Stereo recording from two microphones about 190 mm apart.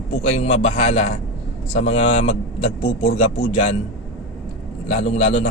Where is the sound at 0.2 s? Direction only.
35° left (ahead or behind).